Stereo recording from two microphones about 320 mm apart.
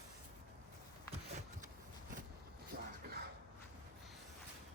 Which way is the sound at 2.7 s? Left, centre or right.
Right.